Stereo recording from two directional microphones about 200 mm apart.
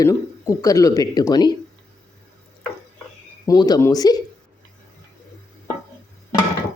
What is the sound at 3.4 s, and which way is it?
Speech, 20° left (ahead or behind).